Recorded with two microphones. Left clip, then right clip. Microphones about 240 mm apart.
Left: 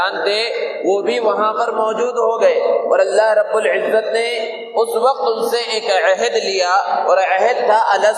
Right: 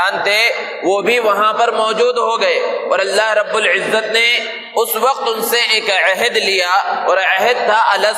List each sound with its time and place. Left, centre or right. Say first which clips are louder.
0.0 s a man's voice: right 4 dB; right
5.5 s speech: right 3 dB; right